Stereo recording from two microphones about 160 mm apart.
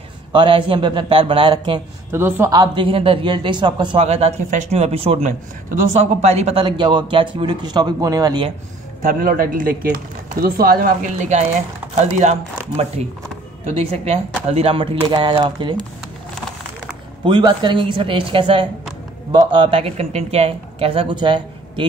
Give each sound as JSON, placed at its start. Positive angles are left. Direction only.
{"t": 0.3, "sound": "speech", "side_deg": -30}
{"t": 2.1, "sound": "speech", "side_deg": -15}
{"t": 2.5, "sound": "speech", "side_deg": -25}
{"t": 6.6, "sound": "a man's voice", "side_deg": -30}
{"t": 9.0, "sound": "speech", "side_deg": -60}
{"t": 17.2, "sound": "speech", "side_deg": -30}